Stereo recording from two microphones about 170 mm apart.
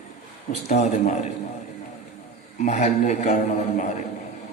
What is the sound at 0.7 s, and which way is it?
Speech, 40° left (ahead or behind).